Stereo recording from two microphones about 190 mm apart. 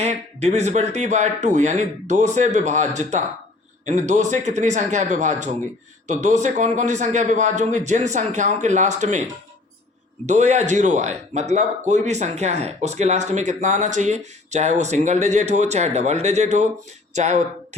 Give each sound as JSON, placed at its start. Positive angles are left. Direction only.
{"t": 0.0, "sound": "speech", "side_deg": -35}
{"t": 10.2, "sound": "speech", "side_deg": -40}